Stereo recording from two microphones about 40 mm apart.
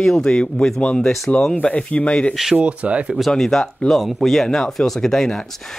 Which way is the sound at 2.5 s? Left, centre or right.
Right.